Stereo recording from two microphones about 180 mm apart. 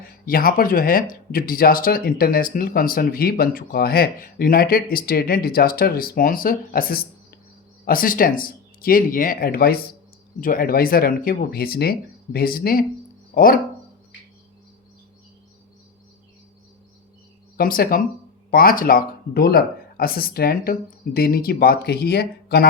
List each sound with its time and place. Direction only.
0.0 s speech: 55° left (ahead or behind)
17.6 s speech: 55° left (ahead or behind)